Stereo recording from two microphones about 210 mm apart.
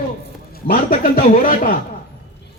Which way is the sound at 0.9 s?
40° left (ahead or behind).